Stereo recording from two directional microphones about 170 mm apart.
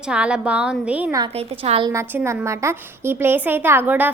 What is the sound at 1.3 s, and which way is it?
Speech, 35° right (ahead or behind).